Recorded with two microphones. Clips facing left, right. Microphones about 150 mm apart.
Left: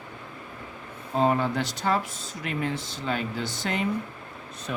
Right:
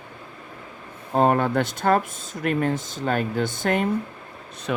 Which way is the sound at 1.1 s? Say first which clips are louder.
Right 4 dB; 55° right (ahead or behind).